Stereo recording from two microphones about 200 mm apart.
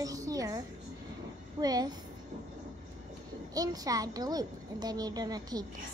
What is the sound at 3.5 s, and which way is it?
A woman's voice, 20° right (ahead or behind).